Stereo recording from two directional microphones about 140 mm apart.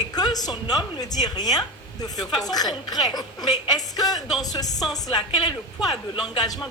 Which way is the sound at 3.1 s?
30° left (ahead or behind).